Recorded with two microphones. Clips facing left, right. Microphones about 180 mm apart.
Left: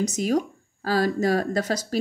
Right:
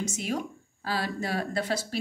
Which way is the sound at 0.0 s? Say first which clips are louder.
Left 8 dB; 40° left (ahead or behind).